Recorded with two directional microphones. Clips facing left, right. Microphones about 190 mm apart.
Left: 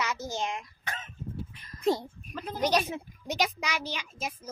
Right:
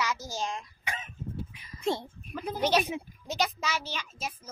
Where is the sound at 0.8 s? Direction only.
10° right (ahead or behind).